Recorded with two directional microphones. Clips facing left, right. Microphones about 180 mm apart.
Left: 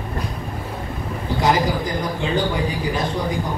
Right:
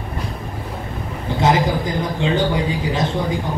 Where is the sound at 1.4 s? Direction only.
25° right (ahead or behind).